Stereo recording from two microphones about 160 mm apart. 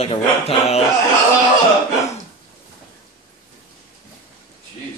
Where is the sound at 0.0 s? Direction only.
35° left (ahead or behind).